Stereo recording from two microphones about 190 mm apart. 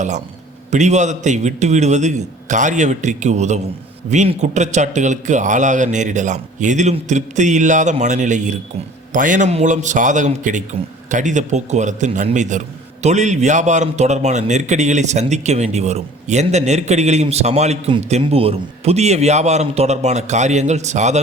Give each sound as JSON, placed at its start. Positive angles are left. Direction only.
{"t": 0.7, "sound": "a man's voice", "side_deg": -40}